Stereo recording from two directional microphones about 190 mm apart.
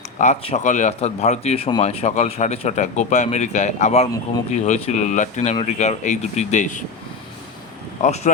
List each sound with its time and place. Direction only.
0.2 s speech: 35° left (ahead or behind)
8.0 s speech: 40° left (ahead or behind)